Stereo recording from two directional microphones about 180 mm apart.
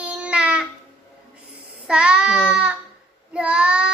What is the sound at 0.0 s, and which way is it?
Babbling, 5° right (ahead or behind).